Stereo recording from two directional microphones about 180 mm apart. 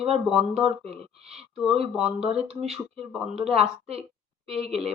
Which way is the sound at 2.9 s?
Centre (ahead or behind).